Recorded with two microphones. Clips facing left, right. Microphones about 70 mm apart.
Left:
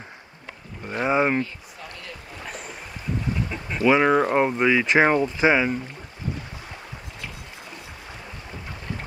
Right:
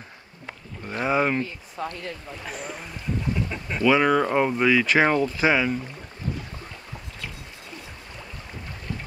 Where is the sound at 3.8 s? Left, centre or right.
Centre.